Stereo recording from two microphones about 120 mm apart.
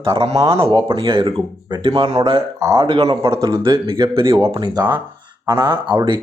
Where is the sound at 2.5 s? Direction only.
25° right (ahead or behind).